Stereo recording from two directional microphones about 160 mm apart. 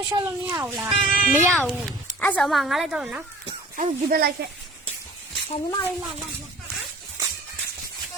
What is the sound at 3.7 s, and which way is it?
Speech, 60° right (ahead or behind).